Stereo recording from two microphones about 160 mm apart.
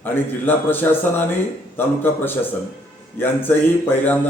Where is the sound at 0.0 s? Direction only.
10° left (ahead or behind).